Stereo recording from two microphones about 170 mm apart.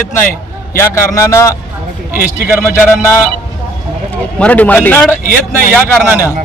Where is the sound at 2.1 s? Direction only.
55° left (ahead or behind).